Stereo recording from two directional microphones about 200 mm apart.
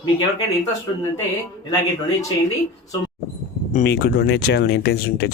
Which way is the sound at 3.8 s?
55° left (ahead or behind).